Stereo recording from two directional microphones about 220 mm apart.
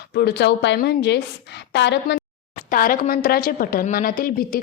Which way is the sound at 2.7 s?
40° left (ahead or behind).